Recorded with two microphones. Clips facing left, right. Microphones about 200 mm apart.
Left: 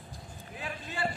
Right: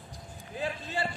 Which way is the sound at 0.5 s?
30° right (ahead or behind).